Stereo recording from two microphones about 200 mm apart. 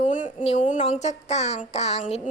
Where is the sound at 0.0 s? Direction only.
40° left (ahead or behind).